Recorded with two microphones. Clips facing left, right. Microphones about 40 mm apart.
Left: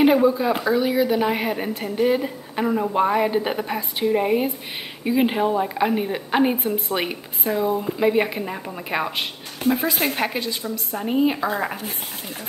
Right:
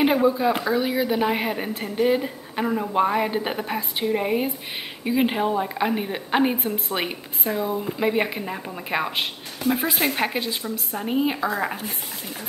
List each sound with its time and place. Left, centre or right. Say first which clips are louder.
0.0 s a woman's voice: left 2 dB; centre
9.6 s speech: left 2 dB; left
10.0 s a woman's voice: even; centre
10.3 s a woman's voice: left 1 dB; centre
11.0 s a woman's voice: left 3 dB; centre